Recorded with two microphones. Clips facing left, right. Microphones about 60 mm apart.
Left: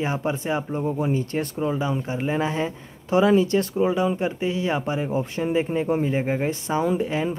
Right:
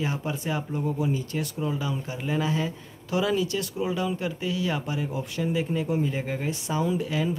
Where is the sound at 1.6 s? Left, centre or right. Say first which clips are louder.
Left 6 dB; left.